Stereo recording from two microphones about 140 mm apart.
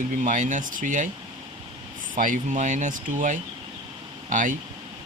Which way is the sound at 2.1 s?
65° right (ahead or behind).